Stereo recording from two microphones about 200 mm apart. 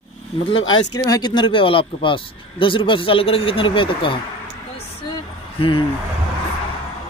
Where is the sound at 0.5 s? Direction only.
20° left (ahead or behind).